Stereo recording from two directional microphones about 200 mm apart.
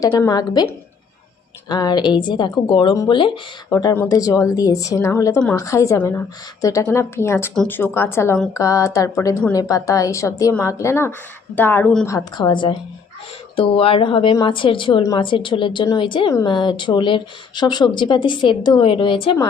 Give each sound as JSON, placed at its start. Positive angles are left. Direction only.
{"t": 0.2, "sound": "a woman's voice", "side_deg": 20}
{"t": 1.7, "sound": "a woman's voice", "side_deg": 20}
{"t": 12.1, "sound": "a woman's voice", "side_deg": 20}